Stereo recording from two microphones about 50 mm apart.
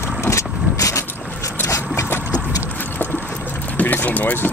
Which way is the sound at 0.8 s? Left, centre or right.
Left.